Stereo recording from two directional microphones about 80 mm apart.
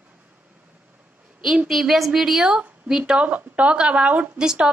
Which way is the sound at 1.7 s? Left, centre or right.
Centre.